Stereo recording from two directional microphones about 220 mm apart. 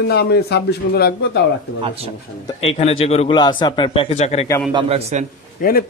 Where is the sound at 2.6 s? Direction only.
25° left (ahead or behind).